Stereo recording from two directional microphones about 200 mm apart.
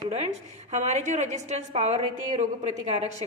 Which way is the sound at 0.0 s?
30° right (ahead or behind).